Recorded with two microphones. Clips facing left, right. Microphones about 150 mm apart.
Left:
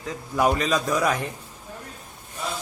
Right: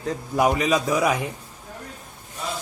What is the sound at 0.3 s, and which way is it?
Speech, 10° right (ahead or behind).